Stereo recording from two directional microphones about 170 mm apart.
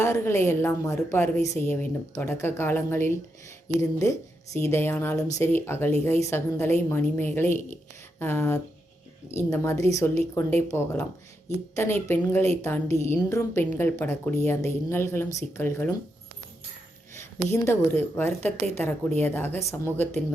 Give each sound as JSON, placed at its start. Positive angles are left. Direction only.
{"t": 0.0, "sound": "a woman's voice", "side_deg": 15}
{"t": 17.2, "sound": "a woman's voice", "side_deg": 15}